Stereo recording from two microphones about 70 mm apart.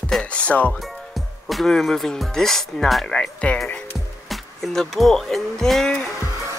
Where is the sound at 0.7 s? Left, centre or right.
Centre.